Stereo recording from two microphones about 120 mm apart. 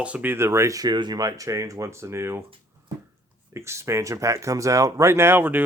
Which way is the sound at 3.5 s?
25° right (ahead or behind).